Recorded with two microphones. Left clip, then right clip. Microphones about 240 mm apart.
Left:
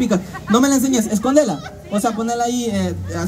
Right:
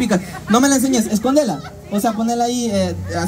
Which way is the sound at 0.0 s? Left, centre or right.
Right.